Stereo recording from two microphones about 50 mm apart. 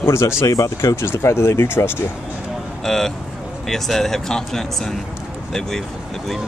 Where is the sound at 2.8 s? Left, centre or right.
Centre.